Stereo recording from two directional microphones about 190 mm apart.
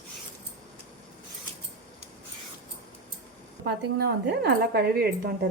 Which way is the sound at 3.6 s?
60° right (ahead or behind).